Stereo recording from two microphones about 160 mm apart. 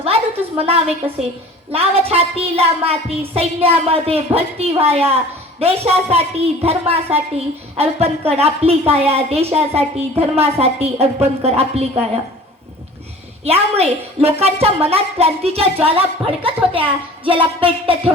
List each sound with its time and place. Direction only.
0.0 s a sound: 35° right (ahead or behind)
1.7 s a woman's voice: 40° right (ahead or behind)
13.4 s a woman's voice: 40° right (ahead or behind)